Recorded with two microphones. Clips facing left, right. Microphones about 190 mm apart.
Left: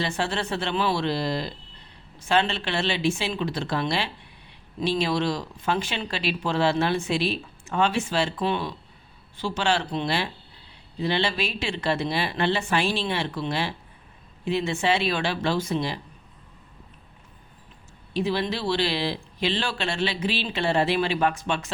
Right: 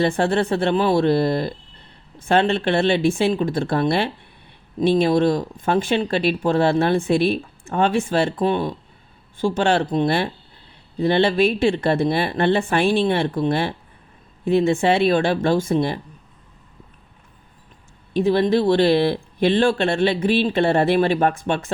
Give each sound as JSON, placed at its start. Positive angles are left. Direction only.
{"t": 0.0, "sound": "speech", "side_deg": -55}
{"t": 18.1, "sound": "speech", "side_deg": -55}